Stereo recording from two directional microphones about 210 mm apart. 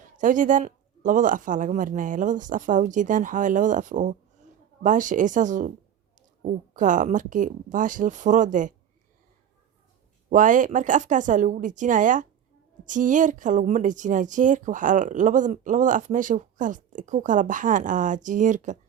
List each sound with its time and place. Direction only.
0.0 s speech: 35° right (ahead or behind)
10.2 s speech: 40° right (ahead or behind)